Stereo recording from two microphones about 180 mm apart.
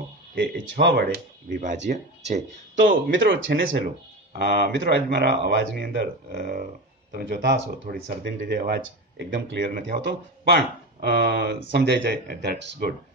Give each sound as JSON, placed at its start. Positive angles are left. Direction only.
{"t": 0.4, "sound": "speech", "side_deg": -70}
{"t": 2.7, "sound": "speech", "side_deg": -90}
{"t": 4.3, "sound": "speech", "side_deg": -60}
{"t": 6.3, "sound": "speech", "side_deg": -45}
{"t": 7.9, "sound": "speech", "side_deg": -55}
{"t": 9.8, "sound": "speech", "side_deg": -65}